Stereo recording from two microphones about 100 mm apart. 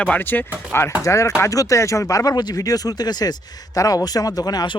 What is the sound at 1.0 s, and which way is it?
Speech, 30° left (ahead or behind).